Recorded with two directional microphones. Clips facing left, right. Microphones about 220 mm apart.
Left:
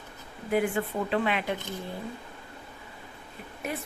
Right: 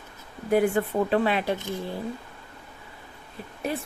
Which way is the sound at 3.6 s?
30° right (ahead or behind).